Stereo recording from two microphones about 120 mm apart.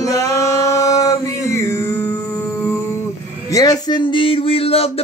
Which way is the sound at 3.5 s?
35° left (ahead or behind).